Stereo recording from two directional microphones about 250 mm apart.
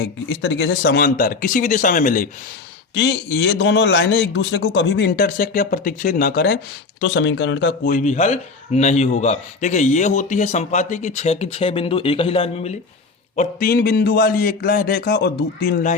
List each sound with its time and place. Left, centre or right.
0.0 s a man's voice: left
2.9 s a man's voice: left